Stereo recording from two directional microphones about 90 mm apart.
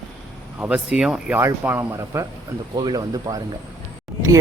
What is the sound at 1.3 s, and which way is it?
Speech, 25° right (ahead or behind).